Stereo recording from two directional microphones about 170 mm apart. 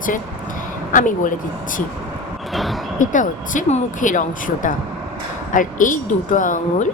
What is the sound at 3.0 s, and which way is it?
Speech, 50° left (ahead or behind).